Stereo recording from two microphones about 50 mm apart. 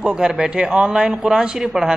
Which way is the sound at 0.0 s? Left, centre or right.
Centre.